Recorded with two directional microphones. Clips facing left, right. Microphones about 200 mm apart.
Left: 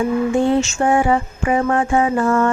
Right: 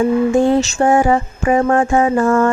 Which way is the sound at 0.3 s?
40° right (ahead or behind).